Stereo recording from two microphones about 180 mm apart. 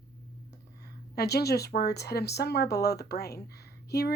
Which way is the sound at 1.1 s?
65° left (ahead or behind).